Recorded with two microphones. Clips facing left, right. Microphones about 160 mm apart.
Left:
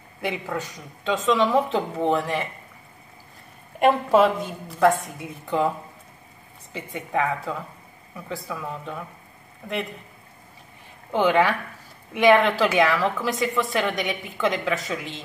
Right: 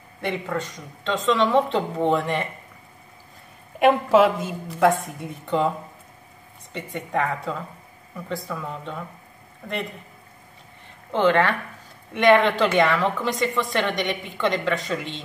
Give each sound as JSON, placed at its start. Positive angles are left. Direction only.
{"t": 0.2, "sound": "a woman's voice", "side_deg": 5}
{"t": 3.8, "sound": "a woman's voice", "side_deg": 0}
{"t": 6.7, "sound": "a woman's voice", "side_deg": 0}
{"t": 11.1, "sound": "a woman's voice", "side_deg": 10}